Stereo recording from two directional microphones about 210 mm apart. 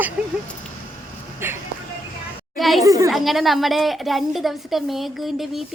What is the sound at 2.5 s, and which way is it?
Children playing, centre (ahead or behind).